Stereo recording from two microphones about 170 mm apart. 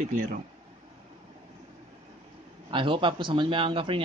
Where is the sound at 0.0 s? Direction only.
50° right (ahead or behind).